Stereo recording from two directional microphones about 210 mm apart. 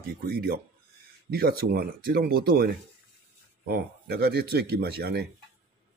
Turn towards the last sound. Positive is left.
turn(degrees=-50)  # may be behind; listen again after turning